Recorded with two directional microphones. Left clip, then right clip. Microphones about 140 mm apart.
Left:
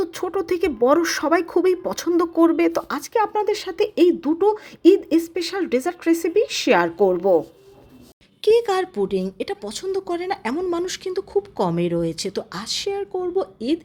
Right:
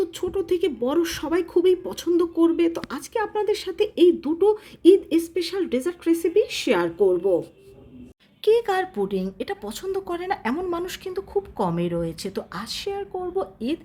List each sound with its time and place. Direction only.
0.0 s speech: 25° left (ahead or behind)
8.4 s speech: 20° left (ahead or behind)